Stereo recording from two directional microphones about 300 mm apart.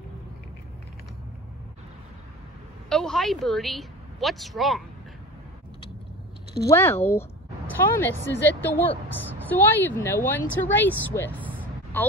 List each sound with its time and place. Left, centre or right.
2.9 s speech: centre
6.6 s a woman's voice: centre
11.5 s a sound: centre